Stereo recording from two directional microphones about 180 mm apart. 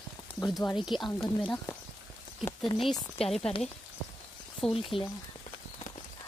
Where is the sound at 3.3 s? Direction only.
5° left (ahead or behind).